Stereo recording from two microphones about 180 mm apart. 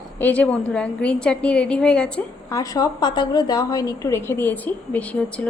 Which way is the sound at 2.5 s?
20° left (ahead or behind).